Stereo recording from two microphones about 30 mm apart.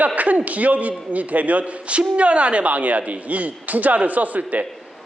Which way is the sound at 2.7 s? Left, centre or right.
Right.